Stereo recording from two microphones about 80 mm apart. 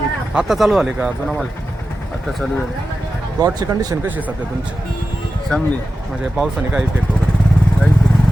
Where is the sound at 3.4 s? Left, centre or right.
Right.